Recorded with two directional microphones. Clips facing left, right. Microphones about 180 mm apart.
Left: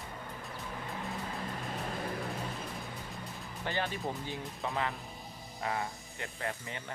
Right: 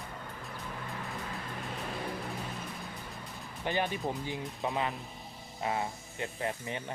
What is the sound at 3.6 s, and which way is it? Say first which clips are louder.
Speech: right 3 dB; 15° right (ahead or behind).